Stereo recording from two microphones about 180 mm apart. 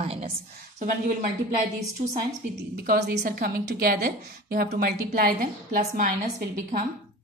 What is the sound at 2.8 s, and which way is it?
A woman's voice, 60° right (ahead or behind).